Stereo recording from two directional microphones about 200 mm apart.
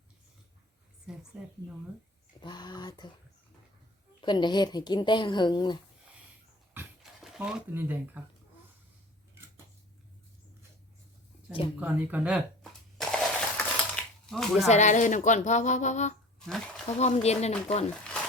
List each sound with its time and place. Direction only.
1.1 s speech: 5° right (ahead or behind)
2.4 s a woman's voice: 20° left (ahead or behind)
4.2 s a woman's voice: 20° left (ahead or behind)
6.7 s a sound: 5° right (ahead or behind)
11.8 s a sound: 10° right (ahead or behind)
14.7 s speech: 35° left (ahead or behind)
16.5 s speech: 5° left (ahead or behind)
17.0 s speech: 35° left (ahead or behind)